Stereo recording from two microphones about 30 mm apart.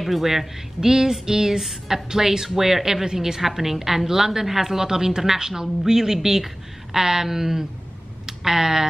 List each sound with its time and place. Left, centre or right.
0.0 s speech: centre
0.7 s music: centre
2.0 s a woman's voice: centre
5.5 s music: centre
6.1 s a woman's voice: centre